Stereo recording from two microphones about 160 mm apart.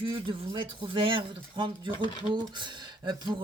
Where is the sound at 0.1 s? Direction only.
30° right (ahead or behind).